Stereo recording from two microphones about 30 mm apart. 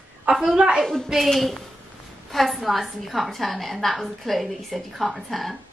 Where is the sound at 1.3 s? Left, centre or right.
Centre.